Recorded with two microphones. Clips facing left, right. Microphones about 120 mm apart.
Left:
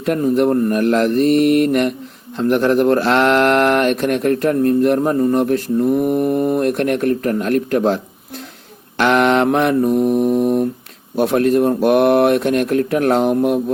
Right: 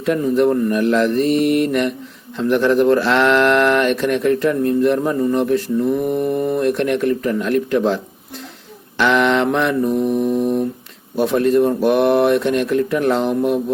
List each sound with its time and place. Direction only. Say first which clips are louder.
0.0 s speech: even; 50° left (ahead or behind)
5.9 s mantra: left 4 dB; 10° left (ahead or behind)
6.4 s speech: left 1 dB; 50° left (ahead or behind)
9.0 s mantra: left 2 dB; 50° left (ahead or behind)
9.9 s mantra: left 3 dB; 10° left (ahead or behind)
11.2 s speech: left 1 dB; 60° left (ahead or behind)